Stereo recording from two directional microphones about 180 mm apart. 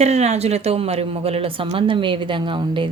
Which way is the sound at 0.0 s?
35° right (ahead or behind).